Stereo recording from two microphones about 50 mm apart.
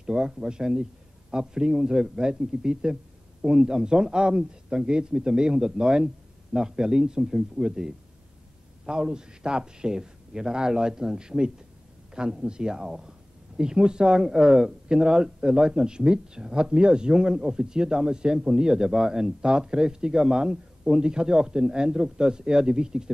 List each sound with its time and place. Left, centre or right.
0.0 s speech: centre